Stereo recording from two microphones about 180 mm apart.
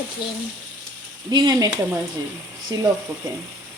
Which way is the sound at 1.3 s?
25° right (ahead or behind).